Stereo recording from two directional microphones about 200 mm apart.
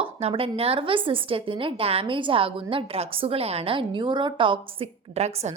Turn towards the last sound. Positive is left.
turn(degrees=-30)  # may be behind; listen again after turning